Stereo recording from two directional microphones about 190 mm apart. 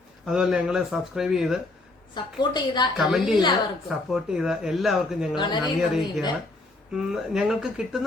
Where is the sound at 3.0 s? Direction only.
5° right (ahead or behind).